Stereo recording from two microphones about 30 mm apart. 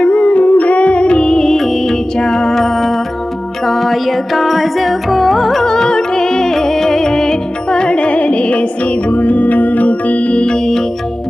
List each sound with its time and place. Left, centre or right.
0.0 s music: left
1.5 s music: centre
2.1 s music: left
3.7 s carnatic music: centre
5.6 s music: left